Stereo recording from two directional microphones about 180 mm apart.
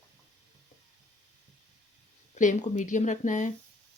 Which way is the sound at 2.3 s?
40° left (ahead or behind).